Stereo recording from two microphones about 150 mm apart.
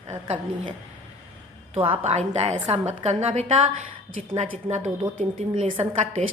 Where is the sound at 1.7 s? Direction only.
35° right (ahead or behind).